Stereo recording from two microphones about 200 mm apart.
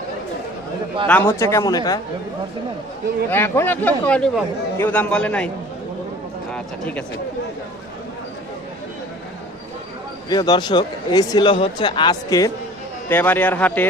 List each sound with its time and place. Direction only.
1.0 s speech: 10° left (ahead or behind)
3.2 s speech: 10° left (ahead or behind)
6.5 s speech: 5° left (ahead or behind)
10.2 s speech: 20° left (ahead or behind)